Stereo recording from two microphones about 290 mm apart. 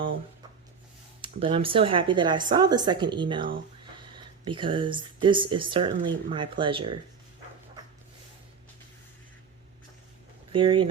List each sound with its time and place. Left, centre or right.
1.2 s speech: centre
10.5 s speech: centre